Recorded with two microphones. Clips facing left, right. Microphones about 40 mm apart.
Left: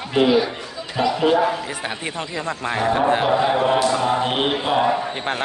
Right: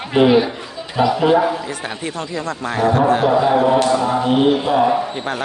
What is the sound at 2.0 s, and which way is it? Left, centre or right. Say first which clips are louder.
Speech: right 4 dB; left.